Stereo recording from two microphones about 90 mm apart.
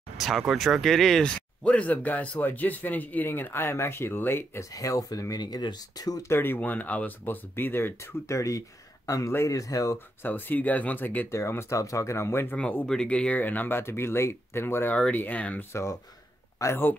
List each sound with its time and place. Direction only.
0.2 s speech: 5° right (ahead or behind); by 4.6 s 25° left (ahead or behind)
4.7 s speech: 40° left (ahead or behind)
6.2 s speech: 25° left (ahead or behind)
10.2 s speech: 20° left (ahead or behind)
11.3 s speech: 30° left (ahead or behind)
12.5 s speech: 15° left (ahead or behind)
15.7 s speech: 35° left (ahead or behind)